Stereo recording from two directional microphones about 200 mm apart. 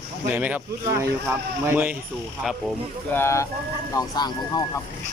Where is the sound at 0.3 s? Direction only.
10° right (ahead or behind).